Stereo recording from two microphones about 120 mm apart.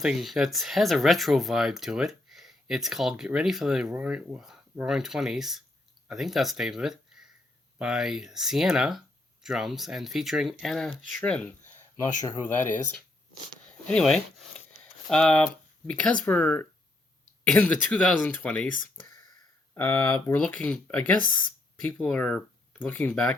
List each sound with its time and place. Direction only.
0.0 s speech: 5° right (ahead or behind)
13.8 s speech: 5° left (ahead or behind)
19.7 s speech: 15° left (ahead or behind)